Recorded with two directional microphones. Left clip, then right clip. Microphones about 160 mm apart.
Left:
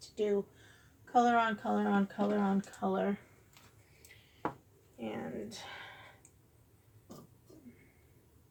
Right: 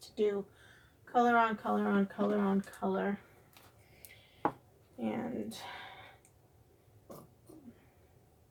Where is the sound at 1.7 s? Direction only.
25° right (ahead or behind).